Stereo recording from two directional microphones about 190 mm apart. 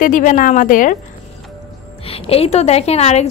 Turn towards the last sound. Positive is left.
turn(degrees=35)  # may be behind; listen again after turning